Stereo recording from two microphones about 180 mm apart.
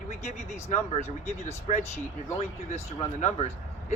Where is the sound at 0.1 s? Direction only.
40° left (ahead or behind).